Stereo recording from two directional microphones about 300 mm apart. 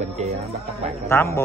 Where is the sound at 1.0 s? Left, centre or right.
Centre.